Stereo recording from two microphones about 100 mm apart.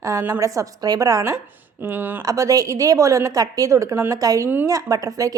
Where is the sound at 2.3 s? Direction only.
35° right (ahead or behind).